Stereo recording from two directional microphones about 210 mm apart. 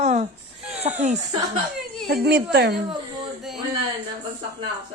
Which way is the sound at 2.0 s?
50° right (ahead or behind).